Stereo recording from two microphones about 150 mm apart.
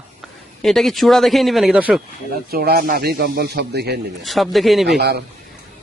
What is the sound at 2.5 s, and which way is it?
Speech, 90° right.